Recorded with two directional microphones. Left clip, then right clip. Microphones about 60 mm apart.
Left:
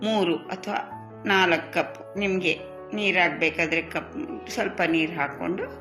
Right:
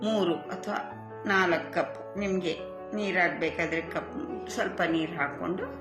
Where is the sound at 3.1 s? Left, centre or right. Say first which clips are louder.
Left 3 dB; left.